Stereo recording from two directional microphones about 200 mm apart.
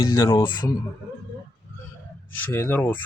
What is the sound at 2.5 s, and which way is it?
Speech, 10° left (ahead or behind).